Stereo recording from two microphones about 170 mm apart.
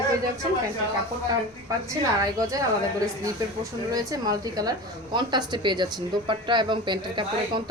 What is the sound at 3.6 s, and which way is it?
Speech, 20° right (ahead or behind).